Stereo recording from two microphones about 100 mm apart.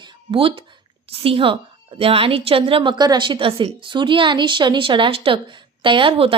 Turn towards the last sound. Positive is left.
turn(degrees=-60)  # may be behind; listen again after turning